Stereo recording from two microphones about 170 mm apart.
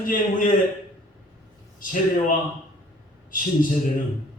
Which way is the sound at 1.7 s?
55° left (ahead or behind).